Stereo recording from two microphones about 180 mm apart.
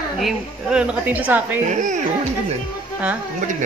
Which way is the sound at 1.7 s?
45° right (ahead or behind).